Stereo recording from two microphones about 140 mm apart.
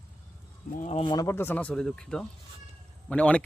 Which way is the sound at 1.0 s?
25° left (ahead or behind).